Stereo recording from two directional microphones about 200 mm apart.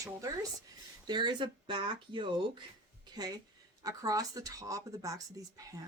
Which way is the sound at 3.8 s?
15° right (ahead or behind).